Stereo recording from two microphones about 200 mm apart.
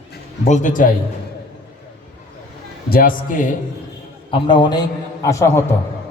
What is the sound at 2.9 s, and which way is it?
Speech, 45° left (ahead or behind).